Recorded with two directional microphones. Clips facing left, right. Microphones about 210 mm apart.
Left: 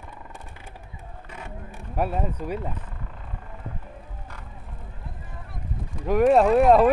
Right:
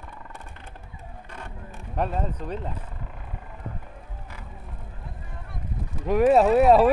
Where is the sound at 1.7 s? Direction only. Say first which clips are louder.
Left 1 dB; 10° left (ahead or behind).